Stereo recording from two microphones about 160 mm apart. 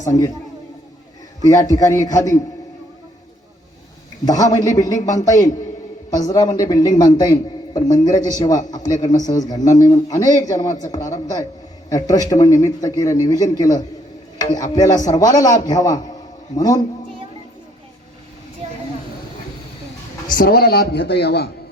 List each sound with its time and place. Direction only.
0.0 s a man's voice: 20° left (ahead or behind)
1.5 s a man's voice: 20° left (ahead or behind)
4.6 s a man's voice: 20° left (ahead or behind)
20.3 s a man's voice: 70° left (ahead or behind); by 21.5 s 90° left